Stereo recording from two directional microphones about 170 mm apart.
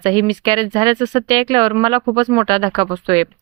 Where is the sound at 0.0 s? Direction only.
25° right (ahead or behind).